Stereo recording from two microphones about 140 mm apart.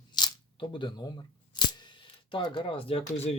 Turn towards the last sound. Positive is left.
turn(degrees=45)  # may be behind; listen again after turning